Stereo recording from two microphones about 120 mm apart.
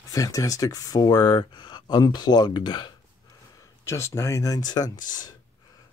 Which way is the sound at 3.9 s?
25° left (ahead or behind).